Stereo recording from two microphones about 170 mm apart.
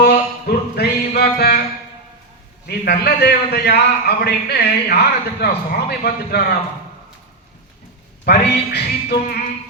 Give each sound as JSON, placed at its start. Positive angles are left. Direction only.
{"t": 0.0, "sound": "music", "side_deg": 70}
{"t": 2.6, "sound": "a man's voice", "side_deg": 70}
{"t": 8.2, "sound": "a man's voice", "side_deg": 75}